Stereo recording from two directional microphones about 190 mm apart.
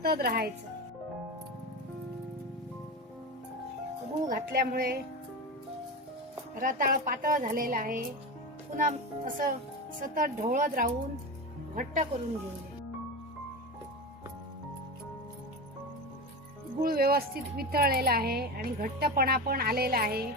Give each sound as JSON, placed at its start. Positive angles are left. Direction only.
{"t": 0.0, "sound": "speech", "side_deg": -55}
{"t": 4.3, "sound": "a woman's voice", "side_deg": -50}
{"t": 6.6, "sound": "a woman's voice", "side_deg": -45}
{"t": 16.8, "sound": "a woman's voice", "side_deg": -50}